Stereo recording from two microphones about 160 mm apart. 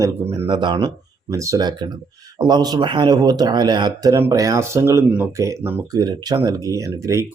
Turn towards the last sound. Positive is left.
turn(degrees=-20)  # may be behind; listen again after turning